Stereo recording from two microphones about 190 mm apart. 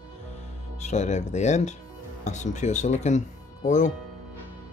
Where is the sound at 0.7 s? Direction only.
40° left (ahead or behind).